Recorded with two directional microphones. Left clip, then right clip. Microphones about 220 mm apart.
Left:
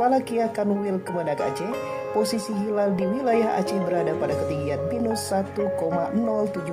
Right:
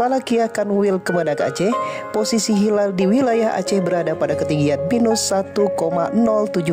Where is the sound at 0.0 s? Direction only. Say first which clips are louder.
Right 4 dB; 45° right (ahead or behind).